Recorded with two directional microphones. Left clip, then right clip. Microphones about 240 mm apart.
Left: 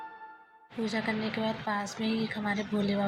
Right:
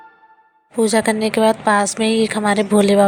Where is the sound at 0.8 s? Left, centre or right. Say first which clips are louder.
Right 16 dB; right.